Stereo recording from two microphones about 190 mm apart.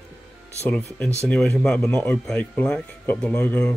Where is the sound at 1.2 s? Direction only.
5° left (ahead or behind).